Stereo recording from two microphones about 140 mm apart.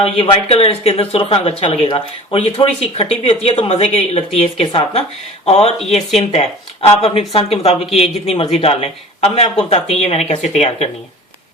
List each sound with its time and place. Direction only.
0.0 s speech: 40° left (ahead or behind)